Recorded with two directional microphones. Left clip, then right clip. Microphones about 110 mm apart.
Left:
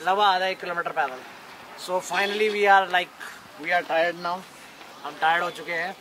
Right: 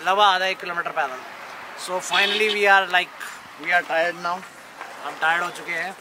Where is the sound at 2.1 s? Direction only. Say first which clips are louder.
Right 5 dB; 15° right (ahead or behind).